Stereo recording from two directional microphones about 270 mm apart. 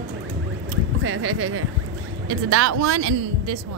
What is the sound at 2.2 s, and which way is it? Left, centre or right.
Speech, right.